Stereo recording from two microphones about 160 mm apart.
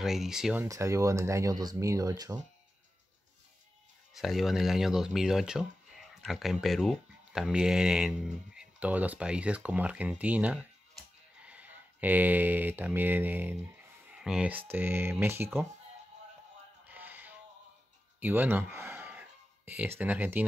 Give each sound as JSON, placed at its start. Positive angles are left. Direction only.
{"t": 0.0, "sound": "speech", "side_deg": 0}
{"t": 0.7, "sound": "speech", "side_deg": -20}
{"t": 4.1, "sound": "speech", "side_deg": 0}
{"t": 16.8, "sound": "music", "side_deg": -10}
{"t": 18.2, "sound": "speech", "side_deg": -10}